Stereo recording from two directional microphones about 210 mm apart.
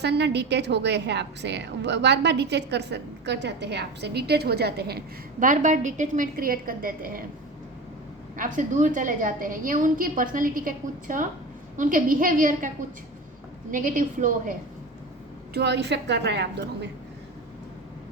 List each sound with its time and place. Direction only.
0.0 s a woman's voice: 55° right (ahead or behind)
8.4 s a woman's voice: 40° right (ahead or behind)
15.5 s a woman's voice: 55° right (ahead or behind)